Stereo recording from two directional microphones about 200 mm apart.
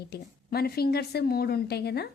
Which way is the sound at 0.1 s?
50° left (ahead or behind).